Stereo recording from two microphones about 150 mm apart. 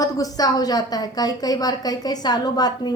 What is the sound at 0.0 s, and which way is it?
A woman's voice, 25° left (ahead or behind).